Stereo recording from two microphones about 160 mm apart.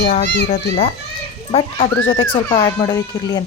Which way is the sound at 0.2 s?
90° left.